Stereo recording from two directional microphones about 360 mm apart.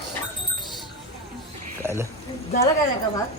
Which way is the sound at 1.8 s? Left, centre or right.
Centre.